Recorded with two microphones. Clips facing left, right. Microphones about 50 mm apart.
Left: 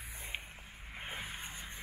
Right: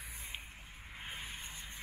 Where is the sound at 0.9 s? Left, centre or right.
Centre.